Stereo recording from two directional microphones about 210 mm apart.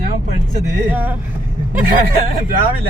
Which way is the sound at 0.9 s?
10° right (ahead or behind).